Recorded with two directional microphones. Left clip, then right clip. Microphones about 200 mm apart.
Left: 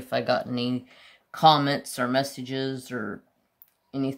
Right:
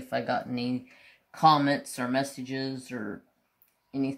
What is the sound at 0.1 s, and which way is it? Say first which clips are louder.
Speech: left 4 dB; 30° left (ahead or behind).